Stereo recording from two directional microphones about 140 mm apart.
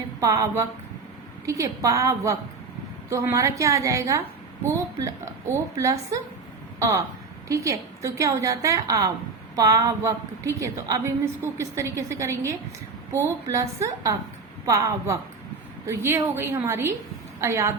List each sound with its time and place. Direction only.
0.2 s a woman's voice: 25° right (ahead or behind)